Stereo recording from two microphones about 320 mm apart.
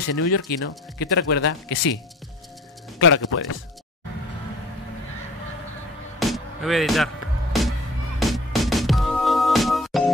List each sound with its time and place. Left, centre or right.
0.5 s speech: left
3.0 s speech: left
6.1 s music: centre